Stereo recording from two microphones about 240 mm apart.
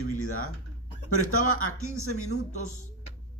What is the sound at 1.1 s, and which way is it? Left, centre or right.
A man's voice, left.